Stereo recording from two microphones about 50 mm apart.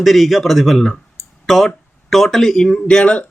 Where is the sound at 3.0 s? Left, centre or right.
Left.